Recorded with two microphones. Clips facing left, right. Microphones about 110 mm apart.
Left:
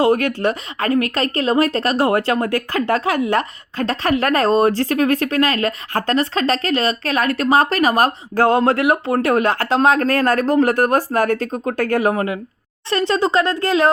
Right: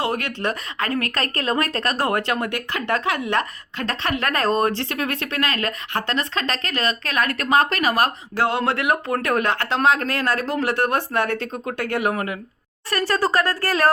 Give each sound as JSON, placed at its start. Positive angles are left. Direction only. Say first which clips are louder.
{"t": 0.4, "sound": "speech", "louder": "left 5 dB", "side_deg": 25}
{"t": 12.1, "sound": "speech", "louder": "left 5 dB", "side_deg": 25}